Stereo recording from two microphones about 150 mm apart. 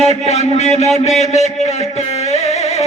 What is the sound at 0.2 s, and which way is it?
A man's voice, 50° left (ahead or behind).